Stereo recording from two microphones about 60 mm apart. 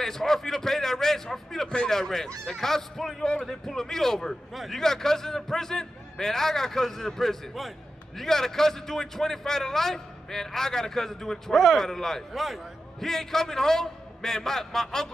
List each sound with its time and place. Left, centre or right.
0.0 s a man's voice: centre
11.5 s a man's voice: centre